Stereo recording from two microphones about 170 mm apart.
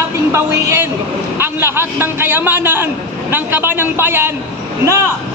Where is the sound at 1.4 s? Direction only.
15° right (ahead or behind).